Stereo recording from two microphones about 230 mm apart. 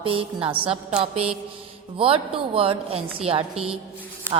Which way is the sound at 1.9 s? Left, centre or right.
Right.